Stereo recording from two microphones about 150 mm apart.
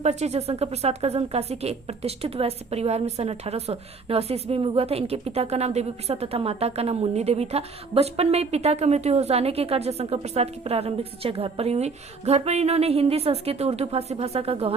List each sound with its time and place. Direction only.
0.0 s a woman's voice: 45° right (ahead or behind)